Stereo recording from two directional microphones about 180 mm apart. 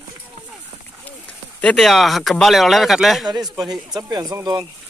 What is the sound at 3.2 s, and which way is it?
Speech, 20° right (ahead or behind).